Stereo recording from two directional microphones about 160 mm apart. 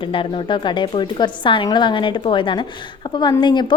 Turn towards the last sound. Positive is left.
turn(degrees=30)  # may be behind; listen again after turning